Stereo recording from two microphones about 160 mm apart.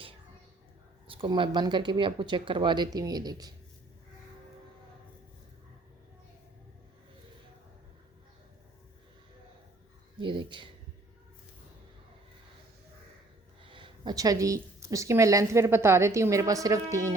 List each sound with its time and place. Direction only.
1.0 s speech: 35° right (ahead or behind)
10.2 s speech: 30° right (ahead or behind)
13.6 s speech: 30° right (ahead or behind)